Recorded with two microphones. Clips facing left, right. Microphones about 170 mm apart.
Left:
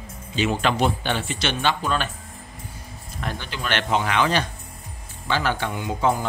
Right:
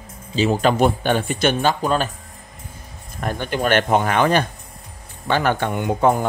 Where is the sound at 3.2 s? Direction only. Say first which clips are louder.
Right 8 dB; 50° right (ahead or behind).